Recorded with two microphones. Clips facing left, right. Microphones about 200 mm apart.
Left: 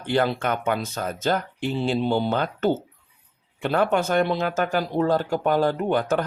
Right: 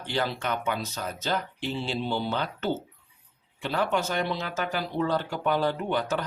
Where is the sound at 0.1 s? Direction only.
55° left (ahead or behind).